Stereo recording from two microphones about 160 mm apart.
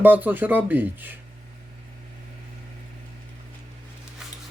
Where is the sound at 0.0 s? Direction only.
10° right (ahead or behind).